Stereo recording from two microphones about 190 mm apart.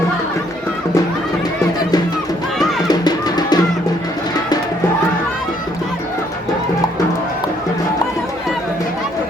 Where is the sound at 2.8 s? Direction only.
20° left (ahead or behind).